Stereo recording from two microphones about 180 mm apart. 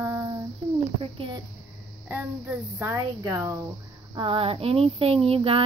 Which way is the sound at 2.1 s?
10° right (ahead or behind).